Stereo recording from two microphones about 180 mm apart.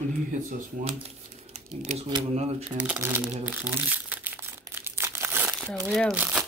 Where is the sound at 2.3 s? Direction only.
35° right (ahead or behind).